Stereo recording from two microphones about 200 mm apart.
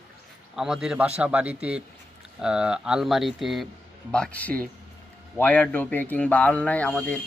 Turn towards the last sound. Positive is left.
turn(degrees=5)  # may be behind; listen again after turning